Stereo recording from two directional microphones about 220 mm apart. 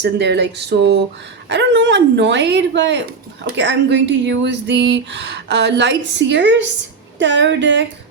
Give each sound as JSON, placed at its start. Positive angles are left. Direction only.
{"t": 0.0, "sound": "speech", "side_deg": -50}